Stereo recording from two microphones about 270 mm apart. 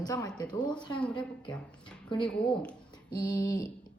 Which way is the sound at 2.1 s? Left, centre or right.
Centre.